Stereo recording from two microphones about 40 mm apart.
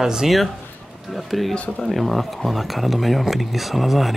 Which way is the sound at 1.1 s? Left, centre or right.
Centre.